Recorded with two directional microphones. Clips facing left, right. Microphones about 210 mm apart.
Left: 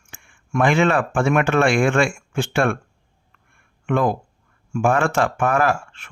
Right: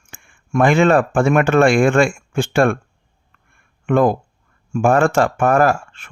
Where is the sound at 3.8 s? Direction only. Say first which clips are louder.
Right 5 dB; 45° right (ahead or behind).